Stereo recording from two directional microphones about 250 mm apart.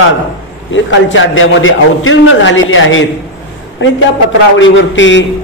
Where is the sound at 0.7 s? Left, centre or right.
Left.